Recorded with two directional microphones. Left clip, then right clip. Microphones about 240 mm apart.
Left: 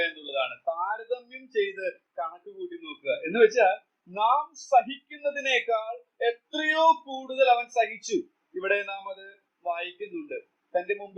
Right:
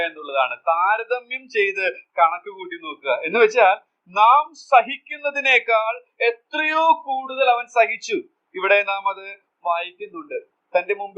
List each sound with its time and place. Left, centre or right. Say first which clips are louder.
0.0 s a man's voice: right 7 dB; centre